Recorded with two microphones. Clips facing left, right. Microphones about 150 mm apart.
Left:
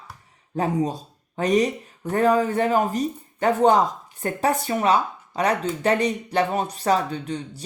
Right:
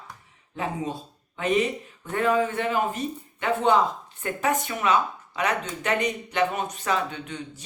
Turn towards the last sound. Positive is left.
turn(degrees=35)  # may be behind; listen again after turning